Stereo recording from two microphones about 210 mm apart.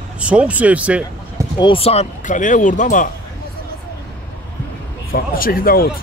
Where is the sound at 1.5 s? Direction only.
25° left (ahead or behind).